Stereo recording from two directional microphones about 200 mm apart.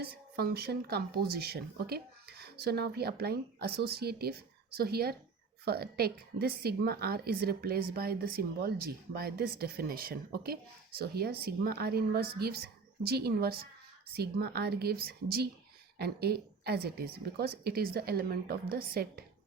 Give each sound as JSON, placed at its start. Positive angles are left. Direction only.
{"t": 0.0, "sound": "a woman's voice", "side_deg": -50}